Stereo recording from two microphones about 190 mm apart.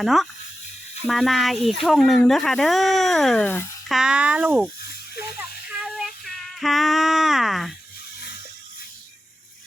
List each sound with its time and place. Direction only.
0.0 s speech: centre (ahead or behind)
3.8 s speech: 5° right (ahead or behind)
4.8 s a sound: 55° left (ahead or behind)
5.8 s female singing: centre (ahead or behind)